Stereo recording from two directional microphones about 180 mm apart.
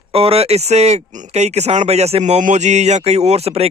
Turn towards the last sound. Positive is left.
turn(degrees=-35)  # may be behind; listen again after turning